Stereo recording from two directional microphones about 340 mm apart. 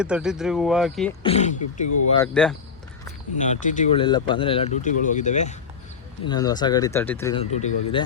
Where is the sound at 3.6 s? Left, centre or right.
Centre.